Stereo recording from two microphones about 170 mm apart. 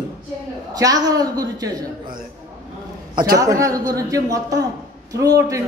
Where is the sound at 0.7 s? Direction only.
25° right (ahead or behind).